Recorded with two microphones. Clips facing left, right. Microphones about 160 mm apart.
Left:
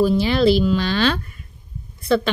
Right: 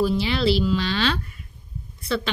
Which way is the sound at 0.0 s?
45° left (ahead or behind).